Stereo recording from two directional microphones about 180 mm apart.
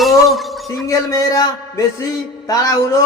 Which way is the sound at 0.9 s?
15° left (ahead or behind).